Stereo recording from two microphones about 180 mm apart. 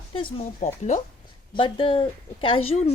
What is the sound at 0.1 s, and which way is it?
Speech, 30° left (ahead or behind).